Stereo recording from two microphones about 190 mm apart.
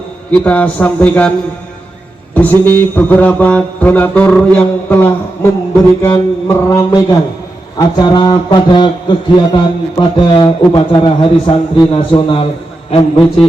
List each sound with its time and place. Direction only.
0.3 s mantra: 10° left (ahead or behind)
2.3 s mantra: 10° left (ahead or behind)
7.8 s a man's voice: 20° left (ahead or behind)